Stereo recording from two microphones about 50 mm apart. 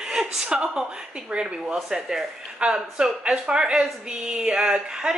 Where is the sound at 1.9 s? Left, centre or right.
Centre.